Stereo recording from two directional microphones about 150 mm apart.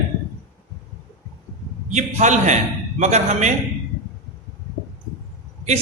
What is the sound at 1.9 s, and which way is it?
A man's voice, 50° right (ahead or behind).